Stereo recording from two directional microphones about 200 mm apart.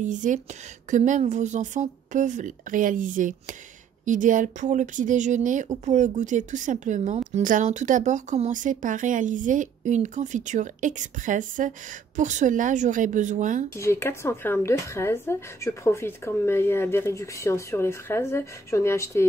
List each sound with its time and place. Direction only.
0.0 s a woman's voice: 40° right (ahead or behind)
13.7 s speech: 15° left (ahead or behind)